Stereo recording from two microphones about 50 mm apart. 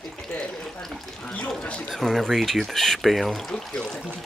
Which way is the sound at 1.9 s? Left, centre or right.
Centre.